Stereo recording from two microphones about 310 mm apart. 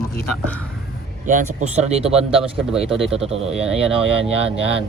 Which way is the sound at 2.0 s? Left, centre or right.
Centre.